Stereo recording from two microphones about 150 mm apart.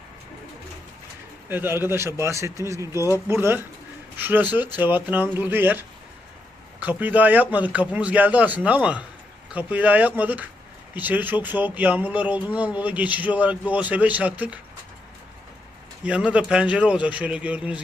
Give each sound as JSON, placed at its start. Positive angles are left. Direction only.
{"t": 1.5, "sound": "speech", "side_deg": -15}
{"t": 16.0, "sound": "speech", "side_deg": -10}